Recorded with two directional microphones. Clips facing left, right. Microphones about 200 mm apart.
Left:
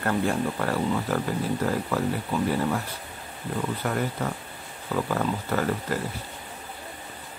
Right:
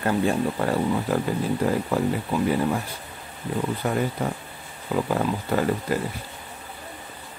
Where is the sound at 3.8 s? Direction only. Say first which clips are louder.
Right 3 dB; 20° right (ahead or behind).